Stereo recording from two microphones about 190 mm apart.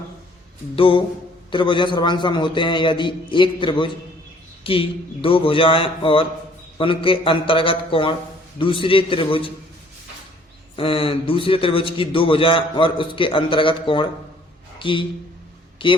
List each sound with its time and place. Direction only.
0.8 s a man's voice: 25° left (ahead or behind)
10.8 s a man's voice: 30° left (ahead or behind)